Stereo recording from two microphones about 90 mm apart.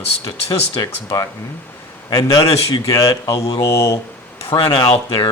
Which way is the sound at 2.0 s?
45° left (ahead or behind).